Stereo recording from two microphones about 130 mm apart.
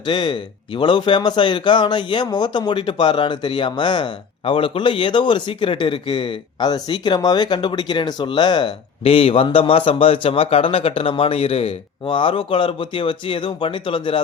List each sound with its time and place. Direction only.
0.0 s speech: 40° left (ahead or behind)